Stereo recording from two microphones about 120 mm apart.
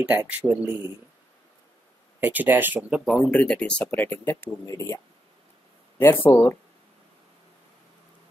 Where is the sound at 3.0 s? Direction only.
Centre (ahead or behind).